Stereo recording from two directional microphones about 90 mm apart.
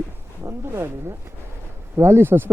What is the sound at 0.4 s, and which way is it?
Speech, 25° right (ahead or behind).